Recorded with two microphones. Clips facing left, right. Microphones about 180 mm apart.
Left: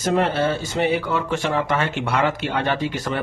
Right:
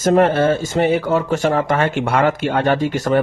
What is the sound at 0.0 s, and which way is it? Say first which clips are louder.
Speech: right 6 dB; 45° right (ahead or behind).